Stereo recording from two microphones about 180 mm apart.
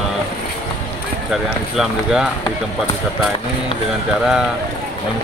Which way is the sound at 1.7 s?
5° right (ahead or behind).